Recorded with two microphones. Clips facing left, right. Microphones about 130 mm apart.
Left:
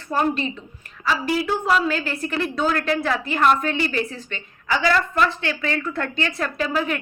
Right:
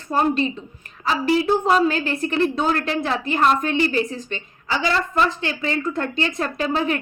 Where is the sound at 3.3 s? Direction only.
35° right (ahead or behind).